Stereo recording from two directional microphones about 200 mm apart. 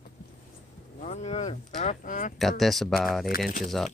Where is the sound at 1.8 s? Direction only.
40° left (ahead or behind).